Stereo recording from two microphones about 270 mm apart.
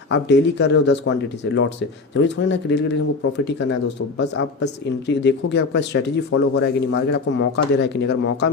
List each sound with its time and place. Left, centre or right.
0.1 s speech: left
2.1 s speech: left